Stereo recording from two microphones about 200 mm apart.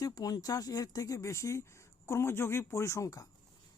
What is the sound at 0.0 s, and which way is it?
Speech, 20° left (ahead or behind).